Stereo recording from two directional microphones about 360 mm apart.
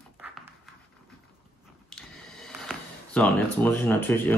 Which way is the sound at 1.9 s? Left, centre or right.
Centre.